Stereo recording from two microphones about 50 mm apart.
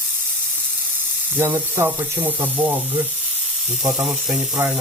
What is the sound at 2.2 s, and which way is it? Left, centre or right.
Speech, right.